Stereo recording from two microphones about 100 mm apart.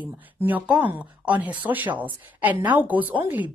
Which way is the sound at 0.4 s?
15° right (ahead or behind).